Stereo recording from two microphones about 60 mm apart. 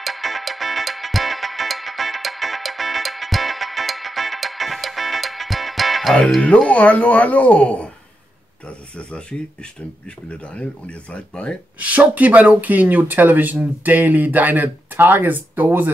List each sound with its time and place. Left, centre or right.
0.0 s music: centre
6.7 s speech: left
11.8 s speech: right